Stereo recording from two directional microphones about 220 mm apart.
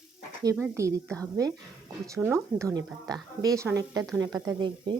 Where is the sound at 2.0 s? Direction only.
10° right (ahead or behind).